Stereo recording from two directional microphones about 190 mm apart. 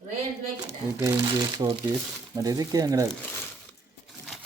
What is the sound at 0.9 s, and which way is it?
Speech, 15° right (ahead or behind).